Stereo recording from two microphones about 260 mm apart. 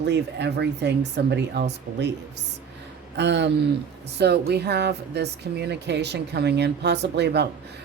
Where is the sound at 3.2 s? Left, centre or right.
Right.